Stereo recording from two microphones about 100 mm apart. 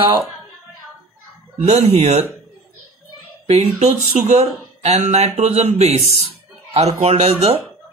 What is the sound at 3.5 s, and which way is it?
Speech, 90° right.